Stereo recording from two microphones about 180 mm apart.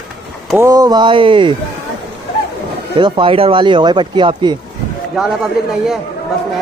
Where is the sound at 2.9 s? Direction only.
25° right (ahead or behind).